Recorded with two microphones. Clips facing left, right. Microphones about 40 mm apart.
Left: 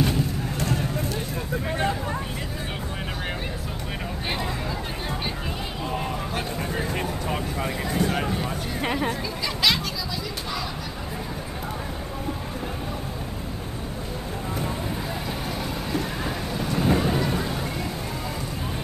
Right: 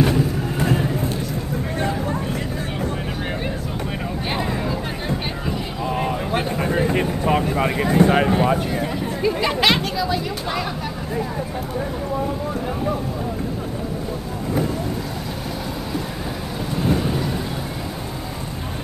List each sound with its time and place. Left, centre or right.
0.0 s vehicle: centre
5.9 s a sound: centre
6.3 s vehicle: right
7.4 s vehicle: right
9.2 s chatter: right
16.7 s thunder: centre